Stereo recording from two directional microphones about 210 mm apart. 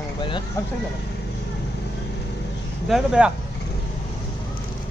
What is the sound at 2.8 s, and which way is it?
Speech, 5° right (ahead or behind).